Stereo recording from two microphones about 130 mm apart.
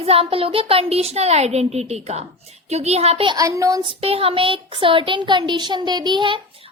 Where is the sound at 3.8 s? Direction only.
45° right (ahead or behind).